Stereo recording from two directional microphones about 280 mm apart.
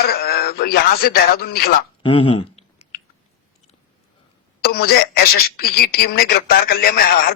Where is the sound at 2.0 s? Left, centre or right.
Centre.